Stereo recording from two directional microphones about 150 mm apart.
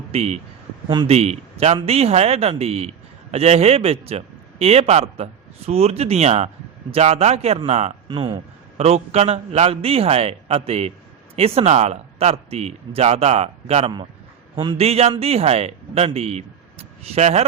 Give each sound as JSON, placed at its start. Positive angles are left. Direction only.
{"t": 0.1, "sound": "speech", "side_deg": -45}
{"t": 8.0, "sound": "speech", "side_deg": -30}
{"t": 8.8, "sound": "speech", "side_deg": -45}